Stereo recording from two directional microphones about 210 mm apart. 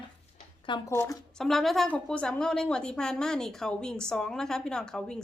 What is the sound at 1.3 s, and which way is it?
A woman's voice, centre (ahead or behind).